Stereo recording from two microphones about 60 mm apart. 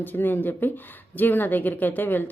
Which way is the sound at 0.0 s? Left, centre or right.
Left.